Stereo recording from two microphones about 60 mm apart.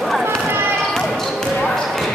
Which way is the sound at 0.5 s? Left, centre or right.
Right.